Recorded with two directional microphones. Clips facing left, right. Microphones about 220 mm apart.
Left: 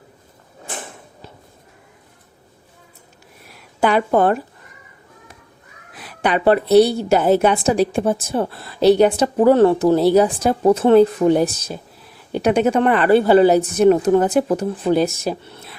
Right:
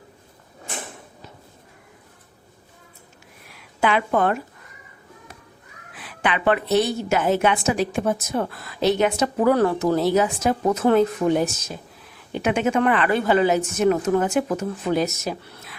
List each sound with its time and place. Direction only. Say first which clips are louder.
3.8 s a woman's voice: left 5 dB; 40° left (ahead or behind)
5.9 s a woman's voice: left 5 dB; 40° left (ahead or behind)